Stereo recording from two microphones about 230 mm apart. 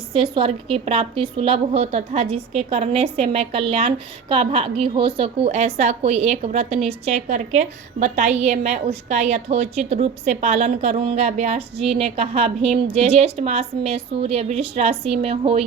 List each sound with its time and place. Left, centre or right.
0.1 s a woman's voice: right